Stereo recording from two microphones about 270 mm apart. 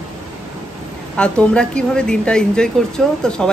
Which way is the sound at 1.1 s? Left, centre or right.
Centre.